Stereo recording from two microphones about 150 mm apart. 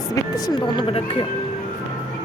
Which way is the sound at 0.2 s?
25° left (ahead or behind).